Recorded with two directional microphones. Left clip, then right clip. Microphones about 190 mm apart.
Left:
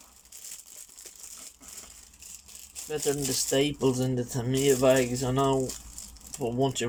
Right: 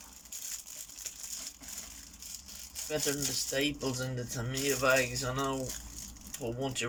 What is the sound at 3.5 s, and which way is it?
Speech, 35° left (ahead or behind).